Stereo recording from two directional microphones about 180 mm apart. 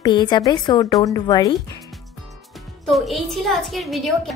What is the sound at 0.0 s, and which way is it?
A woman's voice, 25° left (ahead or behind).